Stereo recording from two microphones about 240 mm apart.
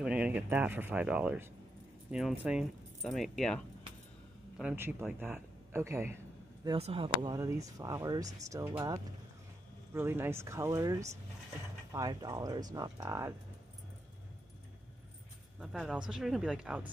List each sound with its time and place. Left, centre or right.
0.0 s speech: centre
6.6 s speech: right
15.6 s speech: centre